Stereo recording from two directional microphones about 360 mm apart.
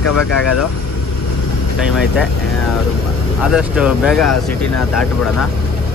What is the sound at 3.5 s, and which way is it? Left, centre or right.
Speech, centre.